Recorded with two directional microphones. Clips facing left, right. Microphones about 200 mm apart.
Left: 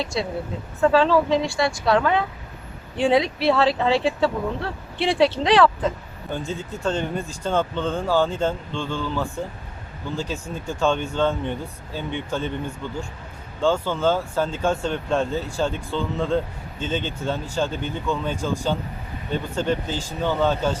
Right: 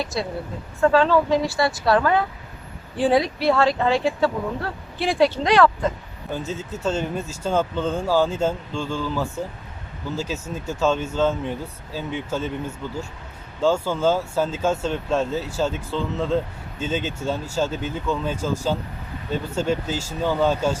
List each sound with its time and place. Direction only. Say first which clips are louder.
0.8 s speech: even; centre (ahead or behind)
3.7 s speech: even; 30° left (ahead or behind)
4.0 s speech: even; centre (ahead or behind)
13.6 s speech: right 1 dB; 5° right (ahead or behind)